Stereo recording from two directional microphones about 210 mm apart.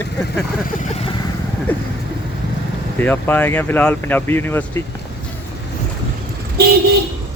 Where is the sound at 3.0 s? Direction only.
10° left (ahead or behind).